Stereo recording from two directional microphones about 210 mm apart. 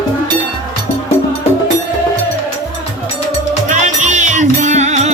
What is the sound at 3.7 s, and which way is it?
Music, 35° right (ahead or behind).